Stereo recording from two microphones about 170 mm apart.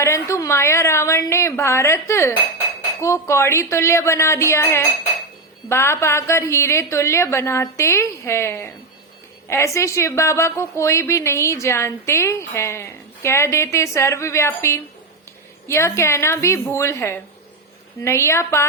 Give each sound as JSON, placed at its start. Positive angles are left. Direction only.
{"t": 0.0, "sound": "a woman's voice", "side_deg": 15}